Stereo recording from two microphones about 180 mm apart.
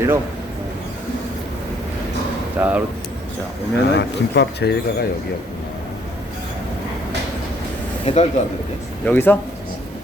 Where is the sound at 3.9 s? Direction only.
65° left (ahead or behind).